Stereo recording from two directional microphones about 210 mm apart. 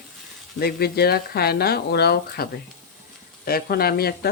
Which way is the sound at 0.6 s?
50° left (ahead or behind).